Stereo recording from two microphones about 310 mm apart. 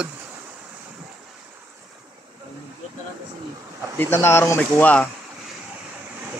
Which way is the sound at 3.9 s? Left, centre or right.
Centre.